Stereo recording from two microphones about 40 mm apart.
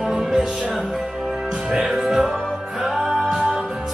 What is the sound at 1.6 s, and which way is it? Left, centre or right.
Music, centre.